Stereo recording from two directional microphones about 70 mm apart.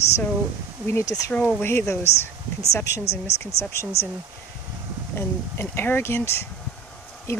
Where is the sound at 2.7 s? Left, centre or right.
Left.